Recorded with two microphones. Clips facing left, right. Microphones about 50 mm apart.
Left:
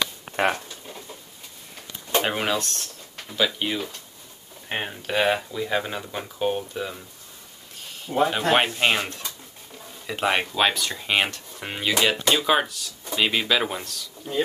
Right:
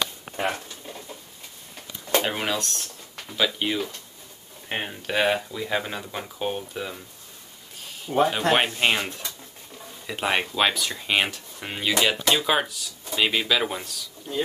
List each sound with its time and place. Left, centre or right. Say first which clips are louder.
2.2 s speech: left 2 dB; centre
8.3 s speech: left 1 dB; centre